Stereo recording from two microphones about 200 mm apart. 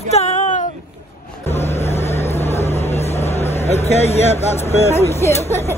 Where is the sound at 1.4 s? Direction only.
30° left (ahead or behind).